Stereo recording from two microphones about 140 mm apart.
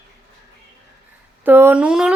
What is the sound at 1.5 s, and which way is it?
Speech, 15° right (ahead or behind).